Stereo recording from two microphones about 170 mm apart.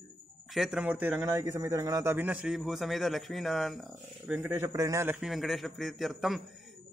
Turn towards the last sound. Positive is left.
turn(degrees=0)  # may be behind; listen again after turning